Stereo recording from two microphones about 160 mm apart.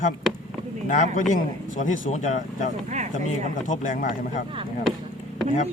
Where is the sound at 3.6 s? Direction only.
55° left (ahead or behind).